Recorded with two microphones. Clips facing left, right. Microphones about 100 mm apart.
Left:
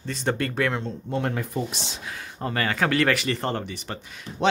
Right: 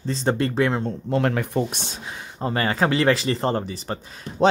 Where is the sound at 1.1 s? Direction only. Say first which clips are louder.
Right 5 dB; 70° right (ahead or behind).